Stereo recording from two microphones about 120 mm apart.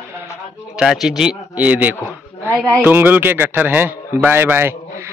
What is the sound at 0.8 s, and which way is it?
A man's voice, 5° right (ahead or behind).